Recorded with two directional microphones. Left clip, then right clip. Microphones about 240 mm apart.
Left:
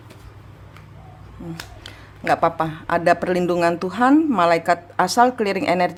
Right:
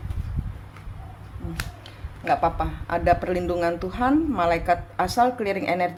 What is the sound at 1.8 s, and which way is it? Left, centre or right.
Speech, left.